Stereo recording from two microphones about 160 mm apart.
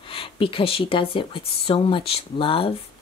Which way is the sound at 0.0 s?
35° left (ahead or behind).